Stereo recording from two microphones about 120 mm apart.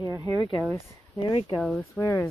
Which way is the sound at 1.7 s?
15° left (ahead or behind).